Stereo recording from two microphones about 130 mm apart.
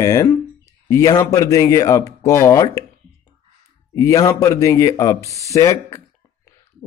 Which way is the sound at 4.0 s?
25° left (ahead or behind).